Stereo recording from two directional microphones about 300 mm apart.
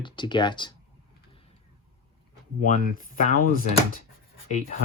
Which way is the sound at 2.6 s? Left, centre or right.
Left.